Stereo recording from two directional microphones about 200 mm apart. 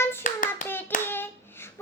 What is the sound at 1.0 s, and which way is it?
Hands, 10° left (ahead or behind).